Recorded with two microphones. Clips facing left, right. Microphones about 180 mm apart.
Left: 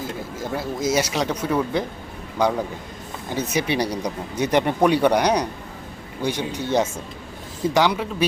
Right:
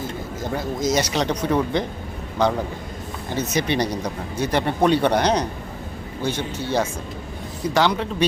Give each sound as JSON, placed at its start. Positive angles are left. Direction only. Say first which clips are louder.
{"t": 0.5, "sound": "speech", "louder": "even", "side_deg": 5}